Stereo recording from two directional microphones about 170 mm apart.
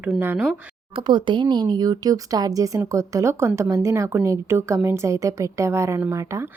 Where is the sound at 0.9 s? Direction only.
30° right (ahead or behind).